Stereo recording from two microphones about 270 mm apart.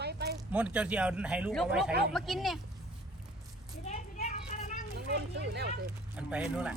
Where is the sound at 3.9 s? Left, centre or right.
Left.